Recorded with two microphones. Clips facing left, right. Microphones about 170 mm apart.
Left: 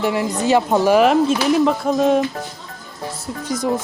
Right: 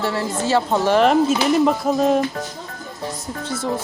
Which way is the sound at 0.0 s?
15° left (ahead or behind).